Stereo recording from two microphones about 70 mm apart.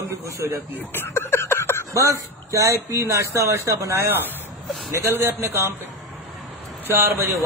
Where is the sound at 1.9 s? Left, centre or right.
Right.